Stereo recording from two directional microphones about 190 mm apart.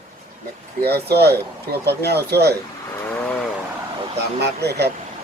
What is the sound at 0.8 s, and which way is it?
Speech, 55° right (ahead or behind).